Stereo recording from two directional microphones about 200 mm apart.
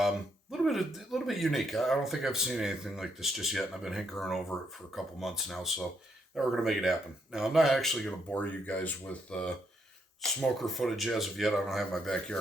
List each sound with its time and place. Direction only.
0.5 s speech: centre (ahead or behind)